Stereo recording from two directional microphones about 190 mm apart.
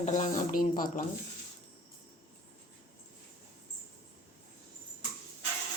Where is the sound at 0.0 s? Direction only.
40° left (ahead or behind).